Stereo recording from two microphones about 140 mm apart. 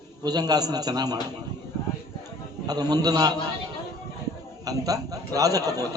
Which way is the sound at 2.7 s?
25° right (ahead or behind).